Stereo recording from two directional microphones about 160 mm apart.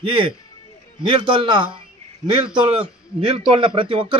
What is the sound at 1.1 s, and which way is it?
A man's voice, 30° right (ahead or behind).